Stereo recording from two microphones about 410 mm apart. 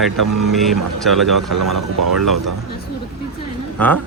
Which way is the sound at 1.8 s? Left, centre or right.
Right.